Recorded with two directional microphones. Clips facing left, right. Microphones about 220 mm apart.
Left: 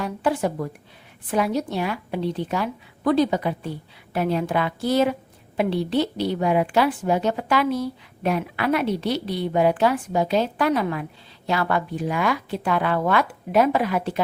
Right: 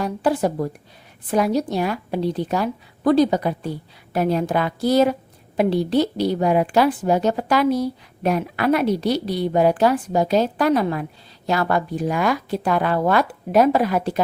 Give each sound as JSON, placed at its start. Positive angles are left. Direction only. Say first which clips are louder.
{"t": 0.0, "sound": "a woman's voice", "louder": "right 3 dB", "side_deg": -40}